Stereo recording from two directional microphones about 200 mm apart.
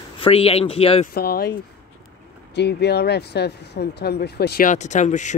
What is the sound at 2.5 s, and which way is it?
Speech, 55° left (ahead or behind).